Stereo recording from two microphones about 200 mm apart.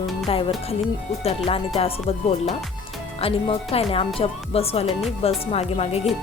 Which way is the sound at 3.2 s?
30° left (ahead or behind).